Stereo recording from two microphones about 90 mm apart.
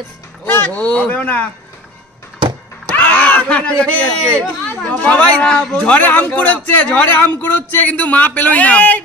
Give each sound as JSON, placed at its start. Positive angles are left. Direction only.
{"t": 0.5, "sound": "a man's voice", "side_deg": 20}
{"t": 3.0, "sound": "a man's voice", "side_deg": 15}